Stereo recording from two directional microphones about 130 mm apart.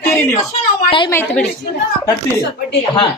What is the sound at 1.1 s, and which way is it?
Speech, 15° left (ahead or behind).